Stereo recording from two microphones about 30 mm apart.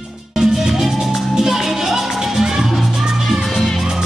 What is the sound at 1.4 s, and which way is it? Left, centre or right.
Music, centre.